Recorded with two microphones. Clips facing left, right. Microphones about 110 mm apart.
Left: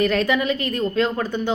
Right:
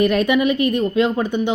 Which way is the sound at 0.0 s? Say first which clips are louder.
Right 4 dB; 20° right (ahead or behind).